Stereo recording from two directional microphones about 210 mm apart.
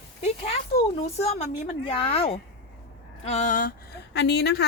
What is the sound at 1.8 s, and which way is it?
Speech, 25° left (ahead or behind).